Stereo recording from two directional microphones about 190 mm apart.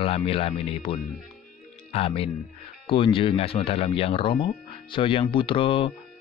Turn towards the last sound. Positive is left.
turn(degrees=25)  # may be behind; listen again after turning